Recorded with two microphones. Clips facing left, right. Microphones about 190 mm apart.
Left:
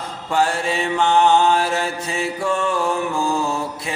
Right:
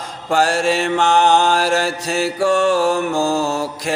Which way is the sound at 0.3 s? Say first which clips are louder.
Right 4 dB; 90° right.